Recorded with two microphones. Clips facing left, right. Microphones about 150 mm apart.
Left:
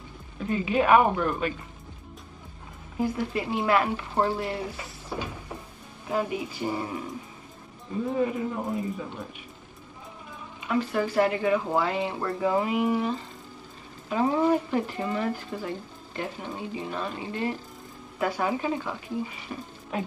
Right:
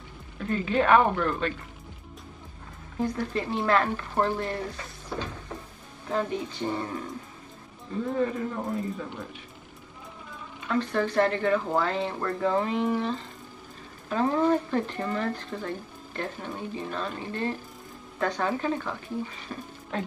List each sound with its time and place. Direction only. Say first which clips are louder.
0.4 s speech: left 1 dB; 15° left (ahead or behind)
3.0 s speech: left 1 dB; 10° left (ahead or behind)
8.2 s speech: left 1 dB; 15° left (ahead or behind)
10.7 s speech: even; 10° left (ahead or behind)